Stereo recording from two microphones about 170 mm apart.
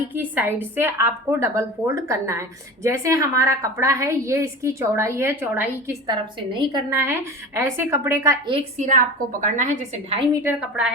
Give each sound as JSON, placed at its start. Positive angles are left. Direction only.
{"t": 0.1, "sound": "a woman's voice", "side_deg": -10}
{"t": 6.1, "sound": "a woman's voice", "side_deg": -25}
{"t": 6.9, "sound": "a woman's voice", "side_deg": -15}
{"t": 8.8, "sound": "a woman's voice", "side_deg": -50}
{"t": 10.4, "sound": "a woman's voice", "side_deg": -5}